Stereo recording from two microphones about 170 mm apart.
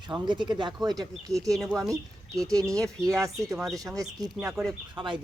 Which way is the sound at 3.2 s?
20° right (ahead or behind).